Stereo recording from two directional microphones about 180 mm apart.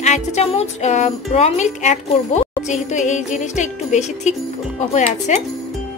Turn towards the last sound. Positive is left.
turn(degrees=40)  # may be behind; listen again after turning